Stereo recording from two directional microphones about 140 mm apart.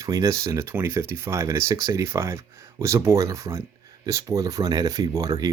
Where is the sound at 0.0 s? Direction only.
25° right (ahead or behind).